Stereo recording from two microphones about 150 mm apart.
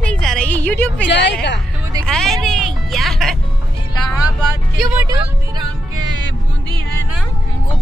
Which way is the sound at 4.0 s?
25° left (ahead or behind).